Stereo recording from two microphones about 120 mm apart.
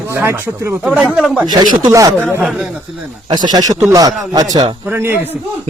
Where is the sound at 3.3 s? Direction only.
35° right (ahead or behind).